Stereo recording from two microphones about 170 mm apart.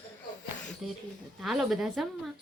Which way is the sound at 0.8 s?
Centre (ahead or behind).